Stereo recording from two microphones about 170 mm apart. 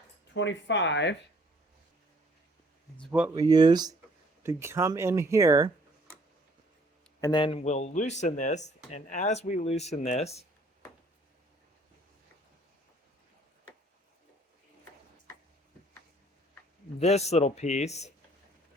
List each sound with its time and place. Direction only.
0.3 s speech: 90° left
3.1 s speech: 10° right (ahead or behind)
3.3 s speech: 25° right (ahead or behind)
7.2 s speech: 25° left (ahead or behind)
17.0 s speech: 40° left (ahead or behind)